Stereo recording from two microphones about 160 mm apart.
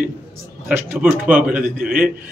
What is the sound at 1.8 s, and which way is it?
Speech, 65° right (ahead or behind).